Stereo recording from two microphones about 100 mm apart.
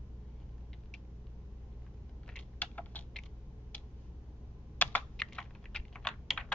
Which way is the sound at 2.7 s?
15° left (ahead or behind).